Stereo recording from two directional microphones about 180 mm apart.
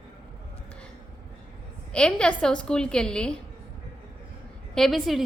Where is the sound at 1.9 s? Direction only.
5° left (ahead or behind).